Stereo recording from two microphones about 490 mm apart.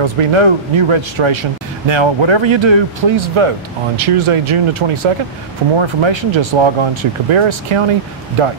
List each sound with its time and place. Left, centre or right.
0.0 s speech: right